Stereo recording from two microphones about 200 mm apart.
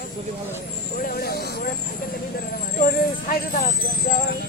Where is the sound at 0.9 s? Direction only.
50° left (ahead or behind).